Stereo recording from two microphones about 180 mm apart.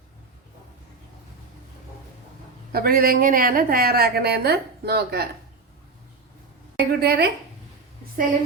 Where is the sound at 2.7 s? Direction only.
55° right (ahead or behind).